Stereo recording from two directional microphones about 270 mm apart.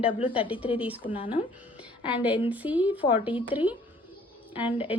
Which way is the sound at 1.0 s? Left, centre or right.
Centre.